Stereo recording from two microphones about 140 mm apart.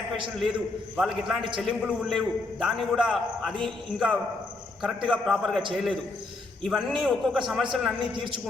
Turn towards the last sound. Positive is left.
turn(degrees=-5)  # may be behind; listen again after turning